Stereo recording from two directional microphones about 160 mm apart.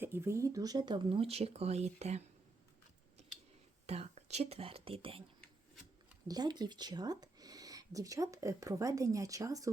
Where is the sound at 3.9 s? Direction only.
40° right (ahead or behind).